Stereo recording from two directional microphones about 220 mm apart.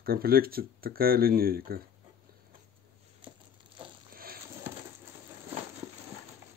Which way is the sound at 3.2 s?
25° right (ahead or behind).